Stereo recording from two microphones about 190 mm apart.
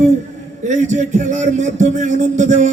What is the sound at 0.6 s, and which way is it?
A man's voice, 40° right (ahead or behind).